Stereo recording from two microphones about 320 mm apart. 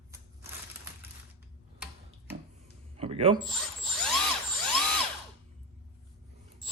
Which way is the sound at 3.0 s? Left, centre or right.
Centre.